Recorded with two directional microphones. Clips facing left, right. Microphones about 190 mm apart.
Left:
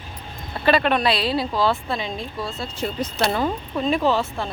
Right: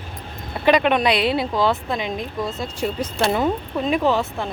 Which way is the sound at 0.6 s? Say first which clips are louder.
Right 2 dB; 15° right (ahead or behind).